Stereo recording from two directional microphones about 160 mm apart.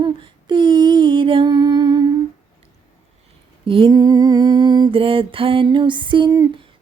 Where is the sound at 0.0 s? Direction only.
30° right (ahead or behind).